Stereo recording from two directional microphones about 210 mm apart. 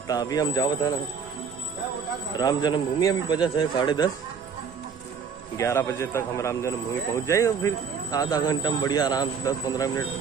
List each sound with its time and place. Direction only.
0.1 s speech: 20° left (ahead or behind)
2.3 s a man's voice: 20° left (ahead or behind)
5.6 s speech: 15° left (ahead or behind)